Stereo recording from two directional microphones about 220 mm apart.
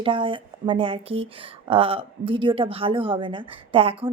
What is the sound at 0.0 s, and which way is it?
A woman's voice, 25° right (ahead or behind).